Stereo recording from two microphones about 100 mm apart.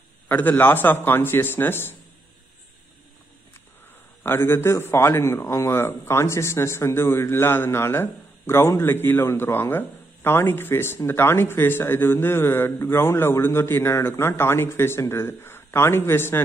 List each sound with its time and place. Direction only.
0.3 s a man's voice: 20° left (ahead or behind)
4.2 s a man's voice: 25° left (ahead or behind)